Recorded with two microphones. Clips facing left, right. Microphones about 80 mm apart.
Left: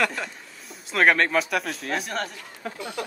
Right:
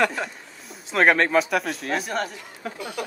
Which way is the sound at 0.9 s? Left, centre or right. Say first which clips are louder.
Right 2 dB; centre.